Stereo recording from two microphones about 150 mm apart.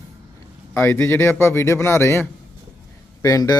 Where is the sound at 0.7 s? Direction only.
15° left (ahead or behind).